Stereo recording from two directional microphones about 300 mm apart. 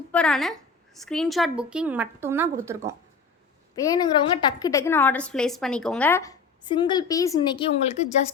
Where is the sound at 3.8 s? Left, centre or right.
Centre.